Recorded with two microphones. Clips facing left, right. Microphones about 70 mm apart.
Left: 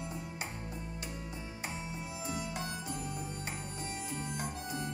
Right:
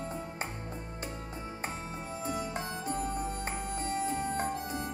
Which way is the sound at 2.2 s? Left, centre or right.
Right.